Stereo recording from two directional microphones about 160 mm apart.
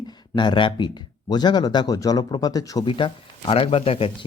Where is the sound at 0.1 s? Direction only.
30° left (ahead or behind).